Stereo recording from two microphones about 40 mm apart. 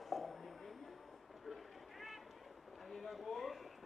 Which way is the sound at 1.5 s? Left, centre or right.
Centre.